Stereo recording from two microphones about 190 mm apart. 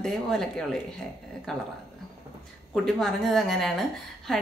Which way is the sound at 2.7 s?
Centre (ahead or behind).